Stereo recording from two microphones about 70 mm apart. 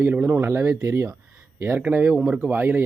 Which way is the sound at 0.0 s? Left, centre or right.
Right.